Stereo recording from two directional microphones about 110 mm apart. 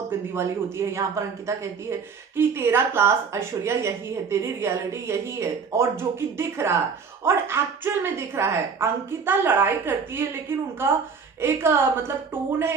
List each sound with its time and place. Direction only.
0.1 s speech: 20° right (ahead or behind)